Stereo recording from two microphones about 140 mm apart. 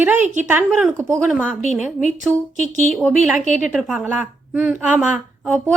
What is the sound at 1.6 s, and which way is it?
Speech, 55° left (ahead or behind).